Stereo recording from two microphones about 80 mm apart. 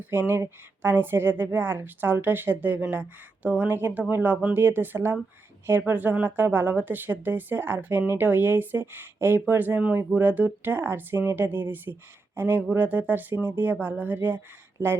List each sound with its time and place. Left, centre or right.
0.0 s speech: right